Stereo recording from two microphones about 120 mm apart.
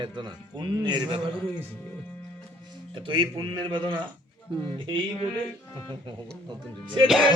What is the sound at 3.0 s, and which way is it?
A man's voice, 45° right (ahead or behind).